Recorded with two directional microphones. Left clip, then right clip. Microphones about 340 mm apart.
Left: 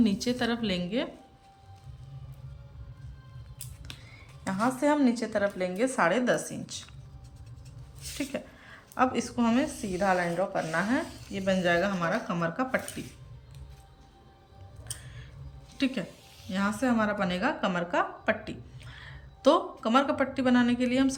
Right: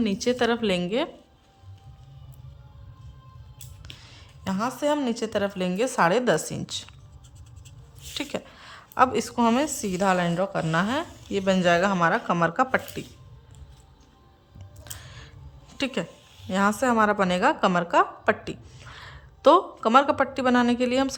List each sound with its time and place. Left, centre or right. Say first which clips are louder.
0.0 s a woman's voice: right 5 dB; centre
4.1 s a woman's voice: right 3 dB; right
8.2 s a woman's voice: right 2 dB; centre
14.8 s a sound: right 3 dB; centre
15.8 s a woman's voice: right 3 dB; centre